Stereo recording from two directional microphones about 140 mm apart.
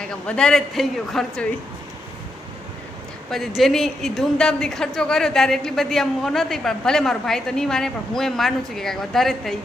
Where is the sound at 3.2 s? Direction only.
Centre (ahead or behind).